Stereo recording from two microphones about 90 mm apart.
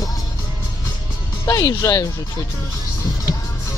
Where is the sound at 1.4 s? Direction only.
40° left (ahead or behind).